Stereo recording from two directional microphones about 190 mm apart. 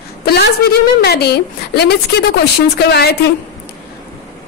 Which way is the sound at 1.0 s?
60° left (ahead or behind).